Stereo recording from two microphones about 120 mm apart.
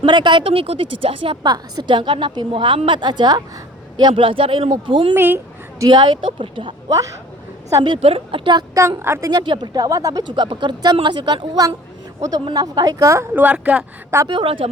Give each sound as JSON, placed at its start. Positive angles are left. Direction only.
{"t": 0.0, "sound": "speech", "side_deg": -40}
{"t": 1.5, "sound": "a woman's voice", "side_deg": -35}
{"t": 5.1, "sound": "speech", "side_deg": -15}
{"t": 5.8, "sound": "speech", "side_deg": -40}
{"t": 7.7, "sound": "a woman's voice", "side_deg": -30}
{"t": 8.0, "sound": "speech", "side_deg": -50}
{"t": 8.7, "sound": "a woman's voice", "side_deg": -25}
{"t": 9.3, "sound": "a woman's voice", "side_deg": -40}
{"t": 12.5, "sound": "a woman's voice", "side_deg": -30}
{"t": 14.3, "sound": "speech", "side_deg": -45}